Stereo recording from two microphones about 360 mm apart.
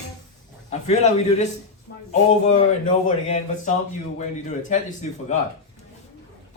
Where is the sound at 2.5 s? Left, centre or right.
Centre.